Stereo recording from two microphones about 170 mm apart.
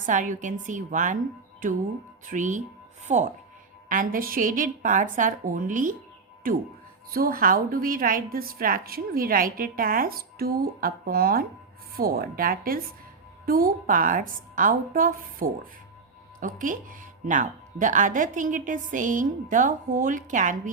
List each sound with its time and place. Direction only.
0.0 s a woman's voice: 50° right (ahead or behind)
2.2 s a woman's voice: 50° right (ahead or behind)
7.1 s a woman's voice: 60° right (ahead or behind)